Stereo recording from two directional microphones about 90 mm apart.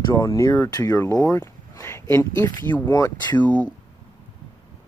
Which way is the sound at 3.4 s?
15° left (ahead or behind).